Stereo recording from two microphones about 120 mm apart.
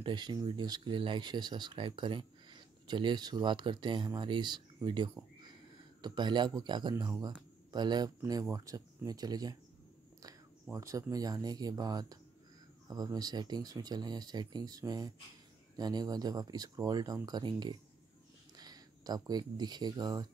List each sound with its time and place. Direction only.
0.0 s speech: 40° right (ahead or behind)